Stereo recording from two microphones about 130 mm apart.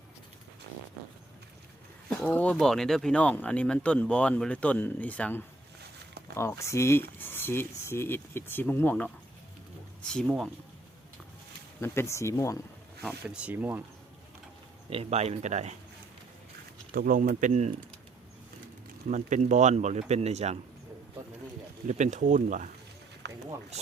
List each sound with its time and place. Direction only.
2.0 s speech: 10° left (ahead or behind)
10.0 s speech: 5° left (ahead or behind)
11.8 s speech: 20° left (ahead or behind)
13.2 s speech: 10° right (ahead or behind)
14.8 s speech: 50° right (ahead or behind)
16.9 s speech: 90° right; by 17.7 s 70° right (ahead or behind)
19.0 s speech: 70° right (ahead or behind)
21.8 s speech: 65° right (ahead or behind)